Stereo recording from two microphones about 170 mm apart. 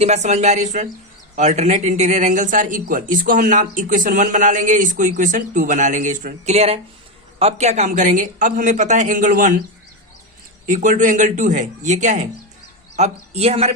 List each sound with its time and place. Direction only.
0.0 s speech: 40° right (ahead or behind)
10.7 s speech: 50° right (ahead or behind)